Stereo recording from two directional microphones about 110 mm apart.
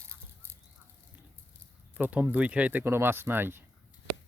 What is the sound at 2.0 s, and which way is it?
Speech, 15° right (ahead or behind).